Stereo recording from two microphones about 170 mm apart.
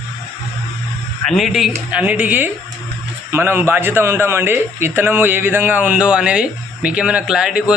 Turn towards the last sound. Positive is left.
turn(degrees=-5)  # may be behind; listen again after turning